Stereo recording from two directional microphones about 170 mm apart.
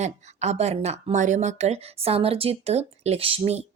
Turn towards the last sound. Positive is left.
turn(degrees=-35)  # may be behind; listen again after turning